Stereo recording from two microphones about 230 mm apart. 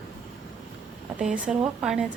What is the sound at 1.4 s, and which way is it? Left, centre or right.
Speech, centre.